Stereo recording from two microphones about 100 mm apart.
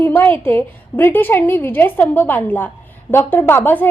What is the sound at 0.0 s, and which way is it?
A woman's voice, 20° left (ahead or behind).